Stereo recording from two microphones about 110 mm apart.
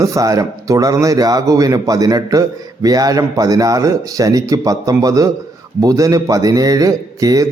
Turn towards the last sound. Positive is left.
turn(degrees=-35)  # may be behind; listen again after turning